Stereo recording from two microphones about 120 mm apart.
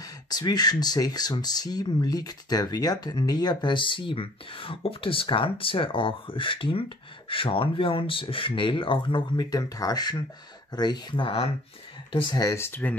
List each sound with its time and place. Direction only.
0.0 s speech: 35° left (ahead or behind)
12.4 s speech: 25° left (ahead or behind)